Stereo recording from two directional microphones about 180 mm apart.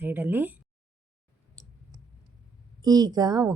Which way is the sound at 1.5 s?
20° right (ahead or behind).